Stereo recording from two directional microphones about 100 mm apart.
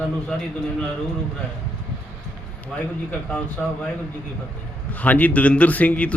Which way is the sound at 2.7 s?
5° left (ahead or behind).